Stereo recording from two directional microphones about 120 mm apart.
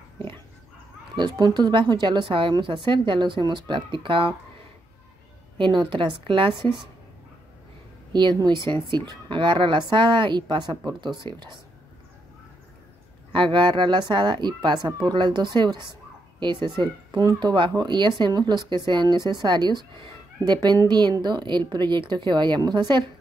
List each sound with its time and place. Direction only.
1.1 s a woman's voice: 40° right (ahead or behind)
5.6 s a woman's voice: 45° right (ahead or behind)
8.1 s speech: 40° right (ahead or behind)
13.3 s speech: 40° right (ahead or behind)